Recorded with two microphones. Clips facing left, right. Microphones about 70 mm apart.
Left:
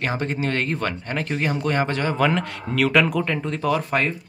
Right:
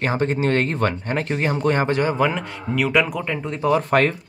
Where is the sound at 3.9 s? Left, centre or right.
Right.